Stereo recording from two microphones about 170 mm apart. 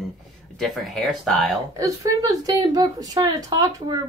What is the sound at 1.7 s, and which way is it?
Speech, 20° right (ahead or behind).